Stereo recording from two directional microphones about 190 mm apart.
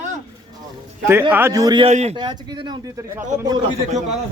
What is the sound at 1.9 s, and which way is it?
Speech, 35° right (ahead or behind).